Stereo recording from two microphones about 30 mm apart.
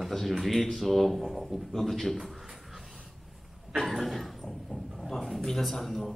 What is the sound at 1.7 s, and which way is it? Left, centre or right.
Speech, centre.